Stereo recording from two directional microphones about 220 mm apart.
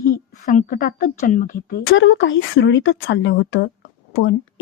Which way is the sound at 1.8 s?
60° left (ahead or behind).